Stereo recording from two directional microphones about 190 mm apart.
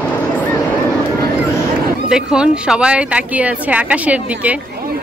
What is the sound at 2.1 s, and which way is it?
Speech, 5° right (ahead or behind).